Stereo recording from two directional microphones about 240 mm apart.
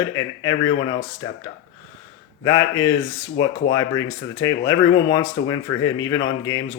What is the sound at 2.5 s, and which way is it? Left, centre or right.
Speech, centre.